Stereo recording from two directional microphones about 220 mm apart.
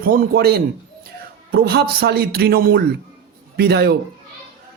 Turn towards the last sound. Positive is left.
turn(degrees=-45)  # may be behind; listen again after turning